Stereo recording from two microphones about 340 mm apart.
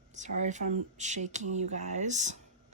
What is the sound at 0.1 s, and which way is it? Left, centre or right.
Speech, right.